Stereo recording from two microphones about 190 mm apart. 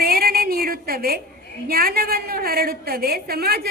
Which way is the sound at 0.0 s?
55° right (ahead or behind).